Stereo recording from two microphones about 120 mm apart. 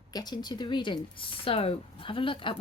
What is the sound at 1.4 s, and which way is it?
Speech, 50° left (ahead or behind).